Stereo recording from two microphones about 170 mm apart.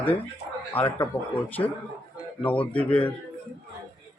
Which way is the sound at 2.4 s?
10° left (ahead or behind).